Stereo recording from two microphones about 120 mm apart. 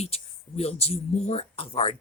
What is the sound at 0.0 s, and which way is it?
Speech, 60° left (ahead or behind).